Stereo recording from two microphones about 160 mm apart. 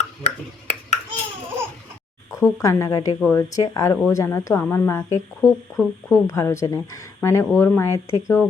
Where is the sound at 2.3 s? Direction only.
20° left (ahead or behind).